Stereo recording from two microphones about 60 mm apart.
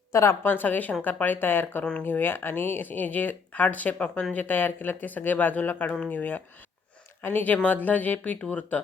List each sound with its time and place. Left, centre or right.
0.1 s a woman's voice: left
0.4 s speech: left
1.8 s speech: centre
2.0 s speech: left; by 4.4 s centre
4.4 s speech: left